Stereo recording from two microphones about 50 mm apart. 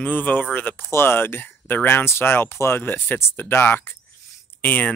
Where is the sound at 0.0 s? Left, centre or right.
Left.